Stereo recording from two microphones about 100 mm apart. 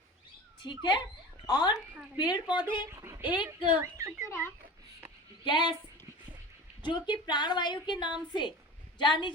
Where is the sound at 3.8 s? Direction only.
25° right (ahead or behind).